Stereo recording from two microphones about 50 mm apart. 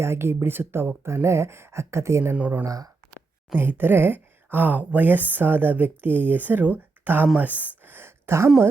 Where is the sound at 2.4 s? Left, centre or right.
Right.